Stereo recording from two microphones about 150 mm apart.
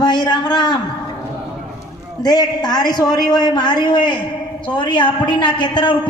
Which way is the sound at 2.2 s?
25° left (ahead or behind).